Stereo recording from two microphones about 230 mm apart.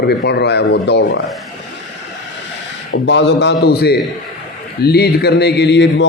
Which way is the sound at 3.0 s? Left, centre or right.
Left.